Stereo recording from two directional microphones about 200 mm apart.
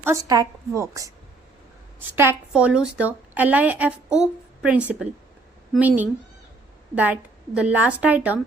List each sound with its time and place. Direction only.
0.0 s a woman's voice: 15° right (ahead or behind)